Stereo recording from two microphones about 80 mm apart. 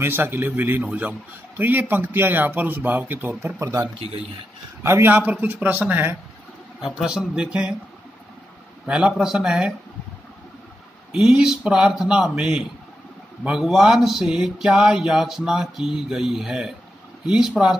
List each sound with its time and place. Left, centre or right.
0.0 s speech: right
4.8 s speech: right
5.1 s speech: centre
7.0 s speech: centre
8.8 s speech: centre
11.1 s speech: centre